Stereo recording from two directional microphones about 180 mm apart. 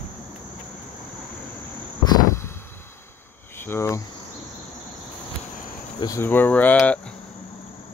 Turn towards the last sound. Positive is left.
turn(degrees=10)  # may be behind; listen again after turning